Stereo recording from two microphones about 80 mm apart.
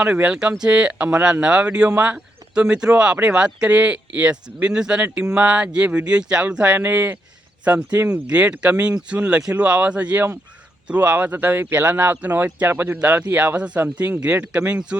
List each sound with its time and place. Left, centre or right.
0.0 s speech: centre